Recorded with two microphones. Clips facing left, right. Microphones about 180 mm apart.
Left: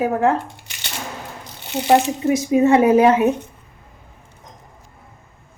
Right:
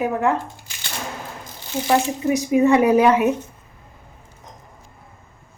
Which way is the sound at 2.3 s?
30° left (ahead or behind).